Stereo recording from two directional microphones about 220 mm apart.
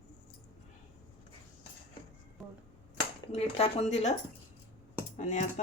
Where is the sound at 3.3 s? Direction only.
30° left (ahead or behind).